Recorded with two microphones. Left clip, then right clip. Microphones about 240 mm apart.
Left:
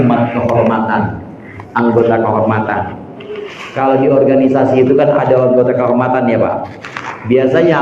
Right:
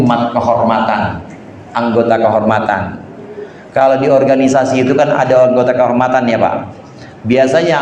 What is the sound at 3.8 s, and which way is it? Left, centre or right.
A man's voice, right.